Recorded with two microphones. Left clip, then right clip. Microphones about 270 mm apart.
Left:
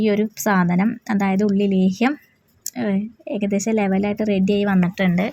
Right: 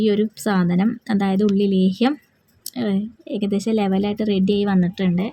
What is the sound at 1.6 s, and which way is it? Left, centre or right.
Speech, left.